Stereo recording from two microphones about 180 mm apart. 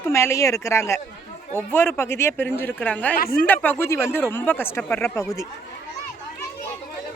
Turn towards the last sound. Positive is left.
turn(degrees=15)  # may be behind; listen again after turning